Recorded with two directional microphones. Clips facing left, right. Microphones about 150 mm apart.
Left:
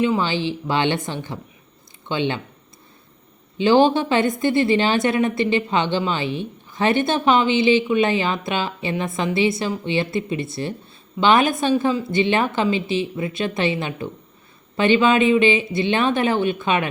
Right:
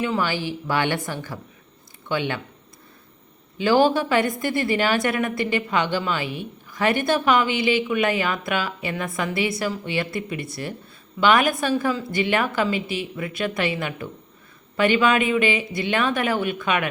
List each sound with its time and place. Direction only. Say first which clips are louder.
0.0 s a woman's voice: left 4 dB; 20° left (ahead or behind)
3.6 s a woman's voice: left 3 dB; 25° left (ahead or behind)